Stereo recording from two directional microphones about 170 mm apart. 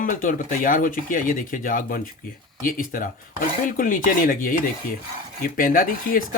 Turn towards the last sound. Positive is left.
turn(degrees=60)  # may be behind; listen again after turning